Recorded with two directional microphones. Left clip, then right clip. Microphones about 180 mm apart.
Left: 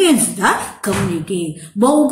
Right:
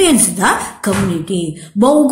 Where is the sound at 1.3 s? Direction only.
30° right (ahead or behind).